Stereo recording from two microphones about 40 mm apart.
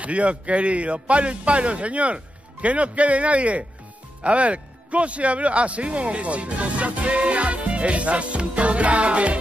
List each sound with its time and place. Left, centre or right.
0.0 s a man's voice: right